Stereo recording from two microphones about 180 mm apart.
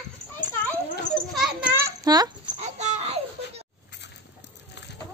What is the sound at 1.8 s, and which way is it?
Babbling, 20° right (ahead or behind).